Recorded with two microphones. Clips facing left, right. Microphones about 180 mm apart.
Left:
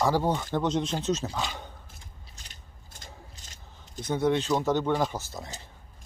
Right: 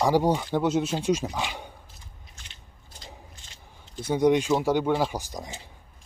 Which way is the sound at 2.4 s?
45° left (ahead or behind).